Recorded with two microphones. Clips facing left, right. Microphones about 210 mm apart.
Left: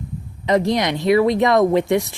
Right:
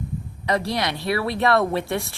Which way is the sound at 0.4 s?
20° left (ahead or behind).